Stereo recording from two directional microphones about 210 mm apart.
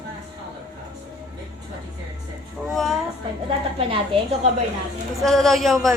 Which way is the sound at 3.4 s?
25° right (ahead or behind).